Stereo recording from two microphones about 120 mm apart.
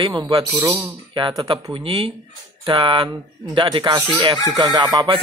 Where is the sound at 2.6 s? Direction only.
45° right (ahead or behind).